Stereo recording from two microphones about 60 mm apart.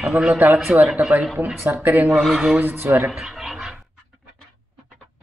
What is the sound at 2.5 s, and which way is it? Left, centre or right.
Speech, right.